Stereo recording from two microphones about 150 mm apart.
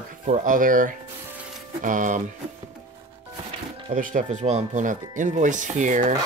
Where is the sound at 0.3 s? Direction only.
65° right (ahead or behind).